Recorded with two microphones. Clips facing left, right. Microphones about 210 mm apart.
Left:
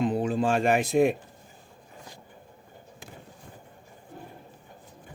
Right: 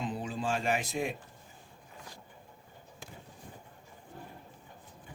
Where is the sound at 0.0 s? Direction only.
60° left (ahead or behind).